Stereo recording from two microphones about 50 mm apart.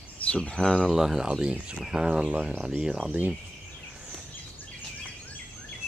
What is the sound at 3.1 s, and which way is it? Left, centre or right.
Speech, right.